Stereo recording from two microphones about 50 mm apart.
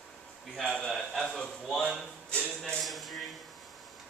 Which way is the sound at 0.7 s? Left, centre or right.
Centre.